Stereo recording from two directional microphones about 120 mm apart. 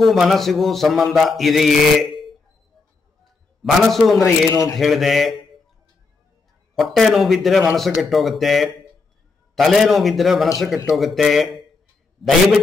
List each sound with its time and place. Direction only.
0.0 s mantra: centre (ahead or behind)
3.6 s mantra: centre (ahead or behind)
4.5 s a man's voice: 30° left (ahead or behind)
4.7 s mantra: centre (ahead or behind)
6.7 s mantra: centre (ahead or behind)